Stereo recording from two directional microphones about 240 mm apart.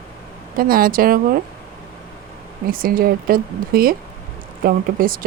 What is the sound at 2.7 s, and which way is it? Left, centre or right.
Speech, right.